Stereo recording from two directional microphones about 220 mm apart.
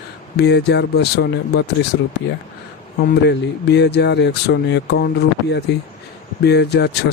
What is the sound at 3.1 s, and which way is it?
Speech, 50° left (ahead or behind).